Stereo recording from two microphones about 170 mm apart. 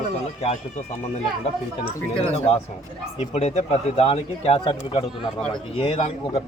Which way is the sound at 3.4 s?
40° left (ahead or behind).